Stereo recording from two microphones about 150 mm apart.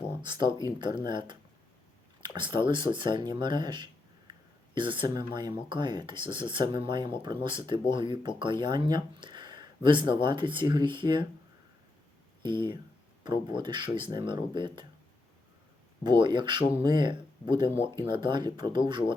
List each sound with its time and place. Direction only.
0.2 s speech: 30° right (ahead or behind)
12.4 s speech: 30° right (ahead or behind)
16.0 s speech: 30° right (ahead or behind)